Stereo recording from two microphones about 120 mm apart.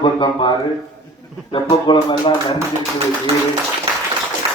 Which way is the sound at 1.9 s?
40° left (ahead or behind).